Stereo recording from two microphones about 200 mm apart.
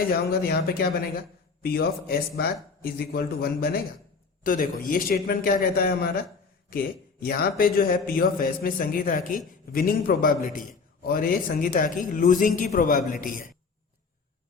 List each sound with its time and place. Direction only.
0.1 s a man's voice: 50° left (ahead or behind)